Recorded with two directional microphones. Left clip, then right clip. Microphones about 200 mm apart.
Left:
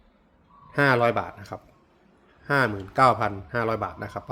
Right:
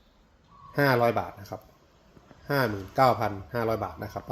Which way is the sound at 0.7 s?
Centre (ahead or behind).